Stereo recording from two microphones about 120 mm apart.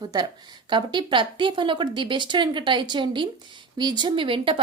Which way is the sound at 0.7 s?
40° right (ahead or behind).